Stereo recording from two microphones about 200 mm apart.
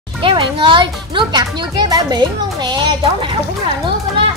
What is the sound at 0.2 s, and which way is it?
A child's voice, 25° right (ahead or behind).